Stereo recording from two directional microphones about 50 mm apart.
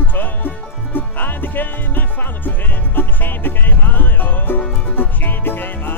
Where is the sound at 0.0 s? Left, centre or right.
Left.